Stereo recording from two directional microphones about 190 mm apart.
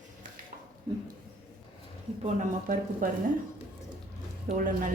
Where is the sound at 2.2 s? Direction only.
45° right (ahead or behind).